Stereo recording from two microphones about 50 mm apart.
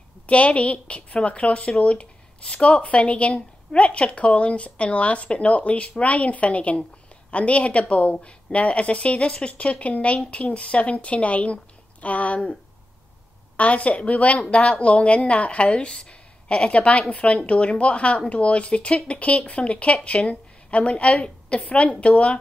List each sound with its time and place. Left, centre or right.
0.3 s a woman's voice: left
13.6 s a woman's voice: left